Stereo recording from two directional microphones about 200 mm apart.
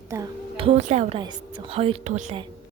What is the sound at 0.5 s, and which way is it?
Music, 30° right (ahead or behind).